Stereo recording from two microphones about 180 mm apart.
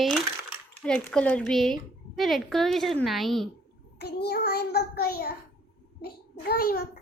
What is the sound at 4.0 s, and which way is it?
Child singing, 65° left (ahead or behind).